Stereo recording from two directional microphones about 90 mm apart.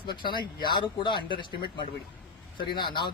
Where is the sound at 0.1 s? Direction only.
60° left (ahead or behind).